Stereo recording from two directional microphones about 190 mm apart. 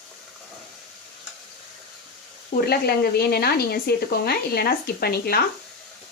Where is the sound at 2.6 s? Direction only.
55° left (ahead or behind).